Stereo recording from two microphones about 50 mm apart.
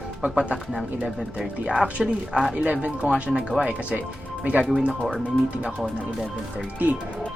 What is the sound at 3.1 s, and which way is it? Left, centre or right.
Music, centre.